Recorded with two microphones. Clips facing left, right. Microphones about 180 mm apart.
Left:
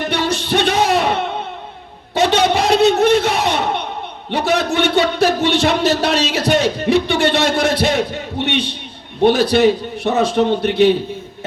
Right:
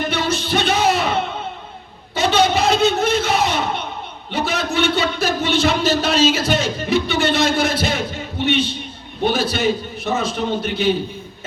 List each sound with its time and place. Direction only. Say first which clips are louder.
0.1 s music: left 2 dB; 70° left (ahead or behind)
2.1 s a sound: left 2 dB; 70° left (ahead or behind)
4.3 s speech: left 5 dB; 70° left (ahead or behind)